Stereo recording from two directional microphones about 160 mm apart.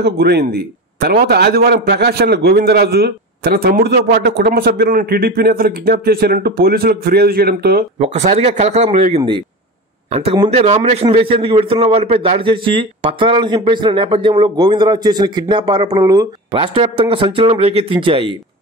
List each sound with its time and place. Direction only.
0.0 s a man's voice: 90° right
8.0 s speech: 45° right (ahead or behind)
10.4 s a man's voice: 45° right (ahead or behind)